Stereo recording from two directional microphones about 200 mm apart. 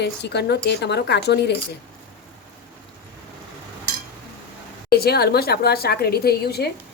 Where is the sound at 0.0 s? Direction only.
60° left (ahead or behind).